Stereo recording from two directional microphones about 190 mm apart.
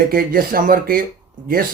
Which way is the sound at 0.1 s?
50° right (ahead or behind).